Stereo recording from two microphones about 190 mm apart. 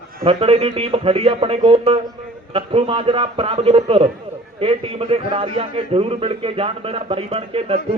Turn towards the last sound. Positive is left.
turn(degrees=-30)  # may be behind; listen again after turning